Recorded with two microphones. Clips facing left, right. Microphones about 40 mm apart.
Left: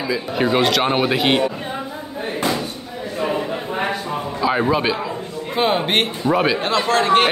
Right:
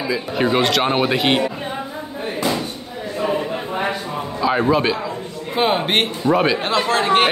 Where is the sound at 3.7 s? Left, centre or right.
Centre.